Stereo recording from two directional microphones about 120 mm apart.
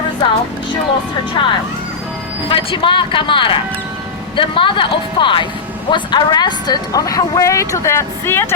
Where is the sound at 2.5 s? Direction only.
45° left (ahead or behind).